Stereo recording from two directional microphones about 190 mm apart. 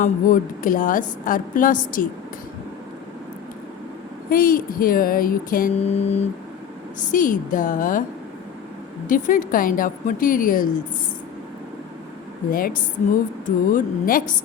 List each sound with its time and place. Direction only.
0.0 s a woman's voice: 45° left (ahead or behind)
4.3 s a woman's voice: 50° left (ahead or behind)
9.0 s a woman's voice: 45° left (ahead or behind)
12.5 s a woman's voice: 50° left (ahead or behind)